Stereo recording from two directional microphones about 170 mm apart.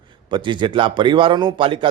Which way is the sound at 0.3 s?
25° right (ahead or behind).